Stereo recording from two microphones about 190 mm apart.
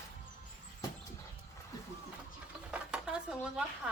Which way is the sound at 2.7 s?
5° right (ahead or behind).